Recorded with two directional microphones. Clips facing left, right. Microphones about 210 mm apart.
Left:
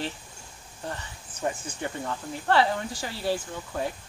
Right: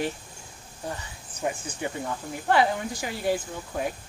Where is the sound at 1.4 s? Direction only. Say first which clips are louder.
Right 1 dB; 10° right (ahead or behind).